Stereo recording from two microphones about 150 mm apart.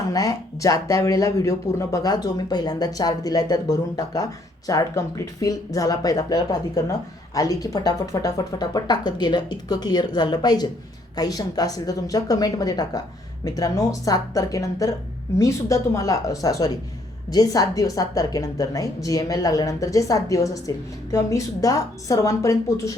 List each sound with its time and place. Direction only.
0.1 s speech: 25° left (ahead or behind)